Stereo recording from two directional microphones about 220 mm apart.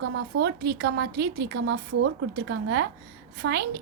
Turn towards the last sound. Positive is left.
turn(degrees=-50)  # may be behind; listen again after turning